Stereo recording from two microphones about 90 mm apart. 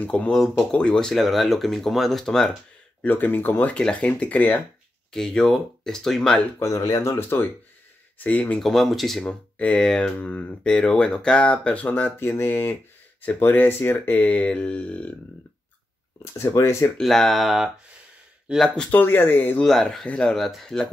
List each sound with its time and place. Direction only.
0.0 s speech: 15° left (ahead or behind)
3.0 s speech: 20° left (ahead or behind)
3.7 s speech: 10° left (ahead or behind)
5.1 s speech: 5° left (ahead or behind)
6.6 s speech: 40° left (ahead or behind)
7.0 s speech: 30° left (ahead or behind)
8.6 s speech: centre (ahead or behind)
9.2 s speech: 15° left (ahead or behind)
16.3 s speech: 35° left (ahead or behind)
16.9 s speech: 5° left (ahead or behind); by 18.6 s 10° right (ahead or behind)
18.9 s speech: 25° left (ahead or behind)
19.6 s speech: 5° left (ahead or behind)